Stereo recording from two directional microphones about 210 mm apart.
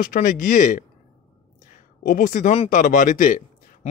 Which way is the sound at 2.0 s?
40° left (ahead or behind).